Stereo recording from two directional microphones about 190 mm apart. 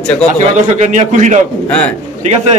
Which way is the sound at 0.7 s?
40° right (ahead or behind).